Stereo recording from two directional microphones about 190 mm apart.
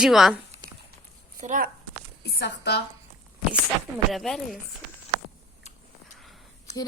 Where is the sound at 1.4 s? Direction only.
45° right (ahead or behind).